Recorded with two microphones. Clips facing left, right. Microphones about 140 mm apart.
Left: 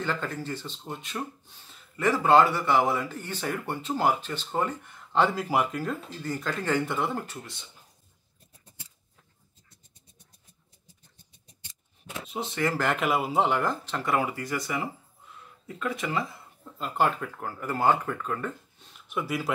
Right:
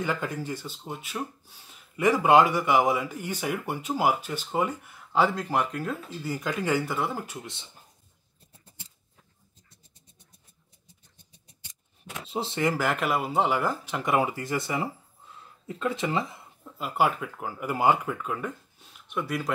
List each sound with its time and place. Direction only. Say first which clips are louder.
0.0 s speech: right 1 dB; 10° right (ahead or behind)
12.3 s speech: right 2 dB; 30° right (ahead or behind)
12.7 s speech: even; centre (ahead or behind); by 16.4 s 20° right (ahead or behind)
16.6 s speech: right 1 dB; 10° right (ahead or behind)